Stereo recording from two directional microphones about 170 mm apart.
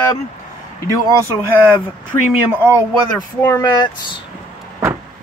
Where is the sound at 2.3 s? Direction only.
10° right (ahead or behind).